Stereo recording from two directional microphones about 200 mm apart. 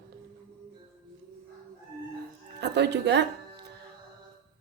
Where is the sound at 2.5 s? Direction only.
60° right (ahead or behind).